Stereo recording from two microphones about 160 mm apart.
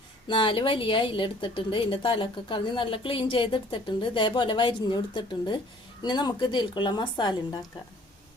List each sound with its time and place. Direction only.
0.3 s a woman's voice: 30° left (ahead or behind)